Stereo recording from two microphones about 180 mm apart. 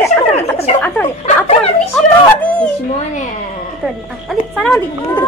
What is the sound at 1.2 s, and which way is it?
Speech, 35° left (ahead or behind).